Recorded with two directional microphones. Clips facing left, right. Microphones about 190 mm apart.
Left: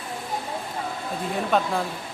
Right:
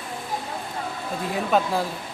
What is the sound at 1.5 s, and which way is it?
Speech, centre (ahead or behind).